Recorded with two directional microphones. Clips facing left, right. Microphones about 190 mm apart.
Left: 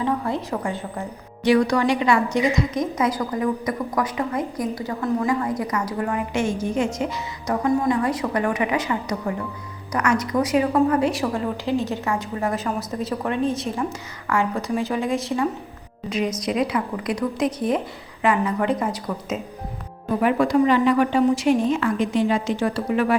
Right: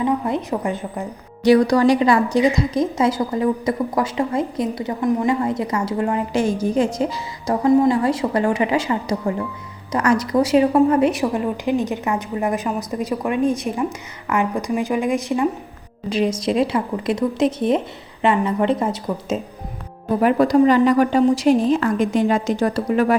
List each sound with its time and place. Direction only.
0.0 s a woman's voice: 15° right (ahead or behind)
1.5 s a woman's voice: 35° right (ahead or behind); by 15.4 s 15° right (ahead or behind)
16.0 s a woman's voice: 30° right (ahead or behind)
20.2 s a woman's voice: 40° right (ahead or behind)